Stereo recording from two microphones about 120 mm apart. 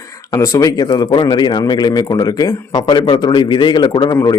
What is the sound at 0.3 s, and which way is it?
Speech, 25° left (ahead or behind).